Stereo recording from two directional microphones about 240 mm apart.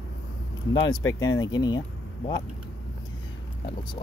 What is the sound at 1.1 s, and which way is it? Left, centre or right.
Speech, centre.